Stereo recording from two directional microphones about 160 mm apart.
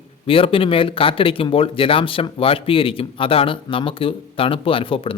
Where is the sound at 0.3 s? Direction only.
35° left (ahead or behind).